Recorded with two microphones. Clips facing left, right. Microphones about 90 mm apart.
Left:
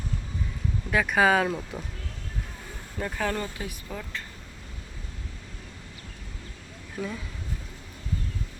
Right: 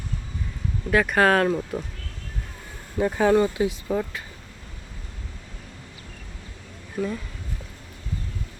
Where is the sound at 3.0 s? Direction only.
20° right (ahead or behind).